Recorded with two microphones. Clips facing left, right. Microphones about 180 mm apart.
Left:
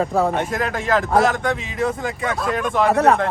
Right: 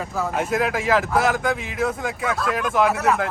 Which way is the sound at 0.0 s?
60° left (ahead or behind).